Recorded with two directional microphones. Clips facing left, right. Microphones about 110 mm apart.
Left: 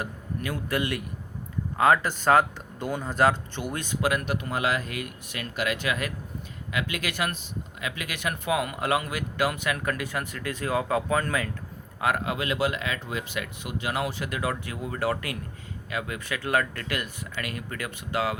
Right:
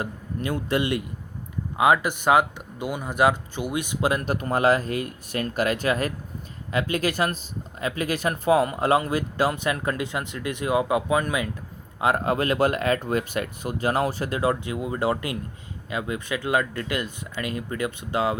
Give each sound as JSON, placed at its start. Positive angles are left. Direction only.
{"t": 0.0, "sound": "speech", "side_deg": -25}
{"t": 4.0, "sound": "speech", "side_deg": -30}
{"t": 11.9, "sound": "speech", "side_deg": -25}
{"t": 12.2, "sound": "speech", "side_deg": -40}